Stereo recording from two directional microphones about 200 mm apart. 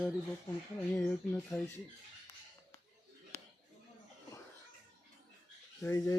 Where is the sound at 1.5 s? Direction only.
15° left (ahead or behind).